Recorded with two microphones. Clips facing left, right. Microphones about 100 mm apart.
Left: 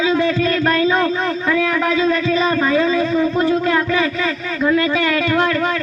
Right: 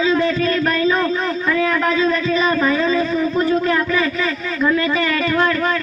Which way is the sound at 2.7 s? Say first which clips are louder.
Left 2 dB; 65° left (ahead or behind).